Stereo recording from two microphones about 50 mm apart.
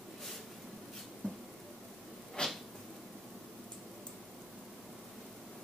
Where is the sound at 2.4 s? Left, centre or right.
Centre.